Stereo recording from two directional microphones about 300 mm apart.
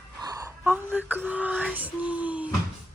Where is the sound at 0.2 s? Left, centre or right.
Centre.